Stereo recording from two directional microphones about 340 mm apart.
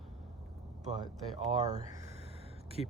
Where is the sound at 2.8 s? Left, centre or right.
Centre.